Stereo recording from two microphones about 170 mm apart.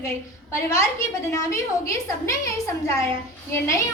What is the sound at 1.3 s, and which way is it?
A child's voice, 15° left (ahead or behind).